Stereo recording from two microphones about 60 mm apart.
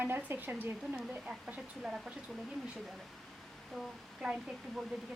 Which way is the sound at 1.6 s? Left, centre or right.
Centre.